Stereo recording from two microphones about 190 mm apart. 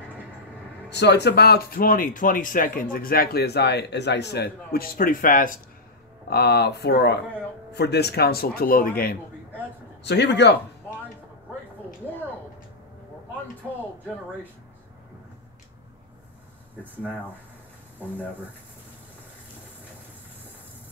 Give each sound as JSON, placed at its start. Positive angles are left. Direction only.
{"t": 0.8, "sound": "speech", "side_deg": 65}
{"t": 6.3, "sound": "speech", "side_deg": 55}
{"t": 10.0, "sound": "speech", "side_deg": 65}